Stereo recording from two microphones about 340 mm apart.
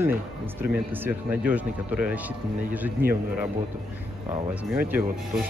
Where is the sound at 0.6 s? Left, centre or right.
Centre.